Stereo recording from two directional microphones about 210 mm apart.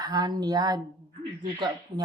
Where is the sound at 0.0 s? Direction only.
20° right (ahead or behind).